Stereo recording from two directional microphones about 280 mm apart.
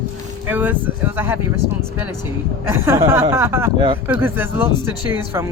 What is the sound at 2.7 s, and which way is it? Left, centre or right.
Speech, centre.